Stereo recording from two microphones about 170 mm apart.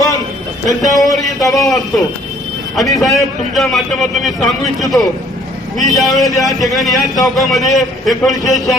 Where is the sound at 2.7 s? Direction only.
Centre (ahead or behind).